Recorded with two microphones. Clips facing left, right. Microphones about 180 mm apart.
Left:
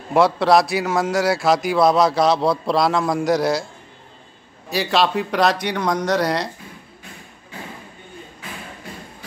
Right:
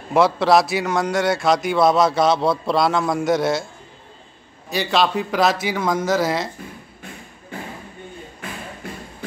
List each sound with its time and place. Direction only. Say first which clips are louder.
0.1 s a man's voice: even; centre (ahead or behind)
4.6 s a man's voice: even; centre (ahead or behind)
8.4 s a sound: right 3 dB; 55° right (ahead or behind)